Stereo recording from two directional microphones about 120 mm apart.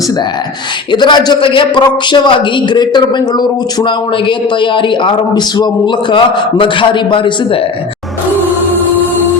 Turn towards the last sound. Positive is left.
turn(degrees=45)  # may be behind; listen again after turning